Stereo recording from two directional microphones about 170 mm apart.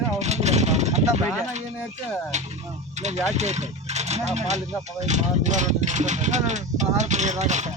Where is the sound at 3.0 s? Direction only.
40° right (ahead or behind).